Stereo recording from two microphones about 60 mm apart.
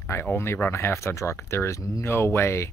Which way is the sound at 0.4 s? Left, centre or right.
Left.